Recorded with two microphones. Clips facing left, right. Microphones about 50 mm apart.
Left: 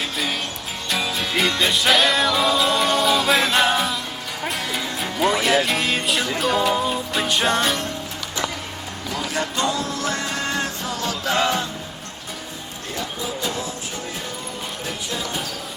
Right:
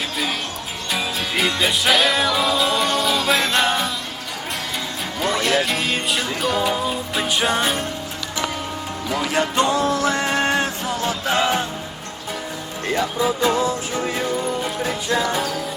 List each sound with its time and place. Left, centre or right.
0.9 s music: centre
5.2 s music: centre
9.1 s music: right